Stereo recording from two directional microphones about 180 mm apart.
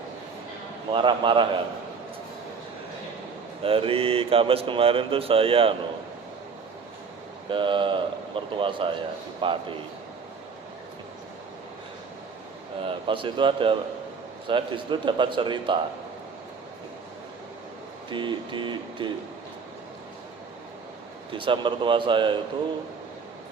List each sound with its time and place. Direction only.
0.9 s a man's voice: 25° right (ahead or behind)
3.6 s speech: 30° right (ahead or behind)
7.5 s a man's voice: 25° right (ahead or behind)
12.8 s a man's voice: 30° right (ahead or behind)
18.1 s a man's voice: 25° right (ahead or behind)
21.3 s a man's voice: 25° right (ahead or behind)